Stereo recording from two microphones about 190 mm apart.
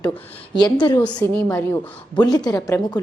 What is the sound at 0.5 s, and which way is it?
Speech, 25° left (ahead or behind).